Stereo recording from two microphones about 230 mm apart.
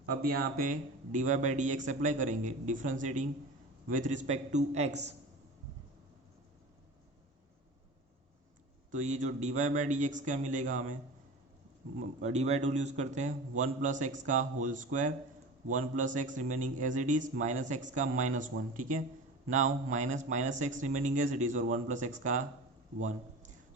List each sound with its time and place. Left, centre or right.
0.0 s a man's voice: right
8.9 s a man's voice: right
12.2 s a man's voice: right